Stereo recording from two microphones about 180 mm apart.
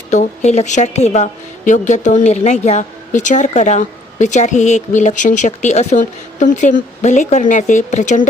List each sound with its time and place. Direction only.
0.1 s a woman's voice: 40° left (ahead or behind)